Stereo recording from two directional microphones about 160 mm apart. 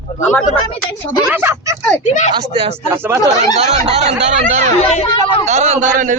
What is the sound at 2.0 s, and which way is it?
Speech, 50° left (ahead or behind).